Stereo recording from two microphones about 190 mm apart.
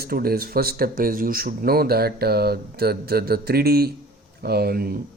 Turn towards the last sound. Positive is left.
turn(degrees=-55)  # may be behind; listen again after turning